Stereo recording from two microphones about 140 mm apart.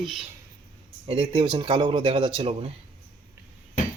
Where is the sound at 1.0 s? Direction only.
40° right (ahead or behind).